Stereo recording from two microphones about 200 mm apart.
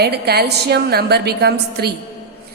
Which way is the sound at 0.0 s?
55° right (ahead or behind).